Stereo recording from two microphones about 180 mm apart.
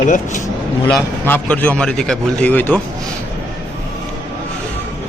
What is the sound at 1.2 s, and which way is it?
Speech, 10° left (ahead or behind).